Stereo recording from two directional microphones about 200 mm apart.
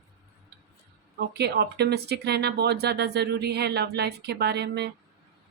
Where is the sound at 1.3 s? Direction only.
55° right (ahead or behind).